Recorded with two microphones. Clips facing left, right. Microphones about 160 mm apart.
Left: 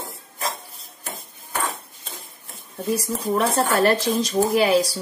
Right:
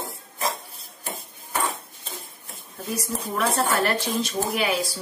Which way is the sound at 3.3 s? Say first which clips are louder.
Left 3 dB; 35° left (ahead or behind).